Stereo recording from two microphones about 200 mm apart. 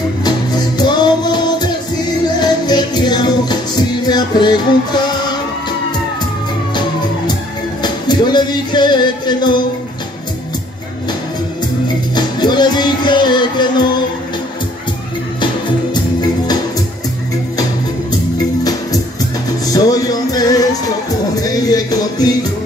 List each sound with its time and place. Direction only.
0.2 s music: 20° left (ahead or behind)
7.8 s music: 20° left (ahead or behind)
12.2 s music: 20° left (ahead or behind)
15.4 s music: 20° left (ahead or behind)
18.4 s music: 20° left (ahead or behind)